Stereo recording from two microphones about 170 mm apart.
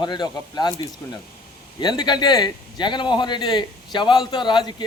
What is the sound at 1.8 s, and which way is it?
A man's voice, 25° left (ahead or behind).